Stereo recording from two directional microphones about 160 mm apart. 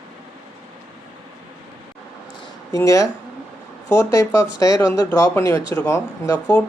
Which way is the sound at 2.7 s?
20° left (ahead or behind).